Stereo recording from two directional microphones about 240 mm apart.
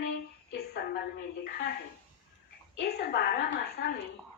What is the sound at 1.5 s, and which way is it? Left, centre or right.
Speech, left.